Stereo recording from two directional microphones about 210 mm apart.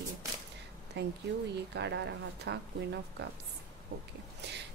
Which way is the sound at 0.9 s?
55° right (ahead or behind).